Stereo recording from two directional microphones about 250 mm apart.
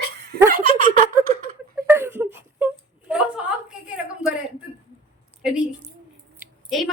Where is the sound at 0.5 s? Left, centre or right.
Right.